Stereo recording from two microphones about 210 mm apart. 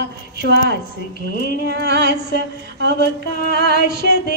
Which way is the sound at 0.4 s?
50° right (ahead or behind).